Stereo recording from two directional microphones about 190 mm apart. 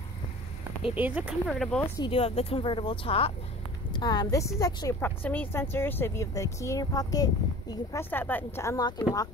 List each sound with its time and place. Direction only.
0.9 s speech: 10° right (ahead or behind)
2.0 s a woman's voice: 30° left (ahead or behind)